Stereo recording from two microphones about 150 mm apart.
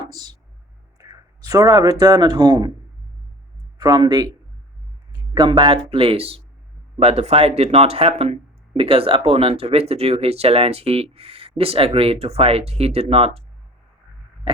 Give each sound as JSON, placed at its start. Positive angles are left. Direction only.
{"t": 0.1, "sound": "speech", "side_deg": -25}
{"t": 3.8, "sound": "speech", "side_deg": -30}